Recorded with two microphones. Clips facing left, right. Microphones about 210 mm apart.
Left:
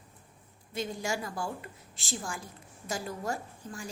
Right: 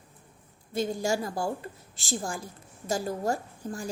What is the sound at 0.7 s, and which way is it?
A woman's voice, 40° right (ahead or behind).